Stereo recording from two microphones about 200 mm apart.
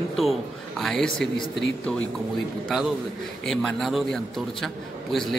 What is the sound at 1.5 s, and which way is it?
Speech, 65° left (ahead or behind).